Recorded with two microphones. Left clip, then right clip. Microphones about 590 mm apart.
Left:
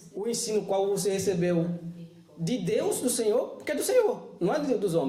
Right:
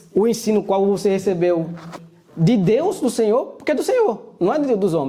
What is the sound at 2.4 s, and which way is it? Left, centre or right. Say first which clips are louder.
Speech: right 13 dB; right.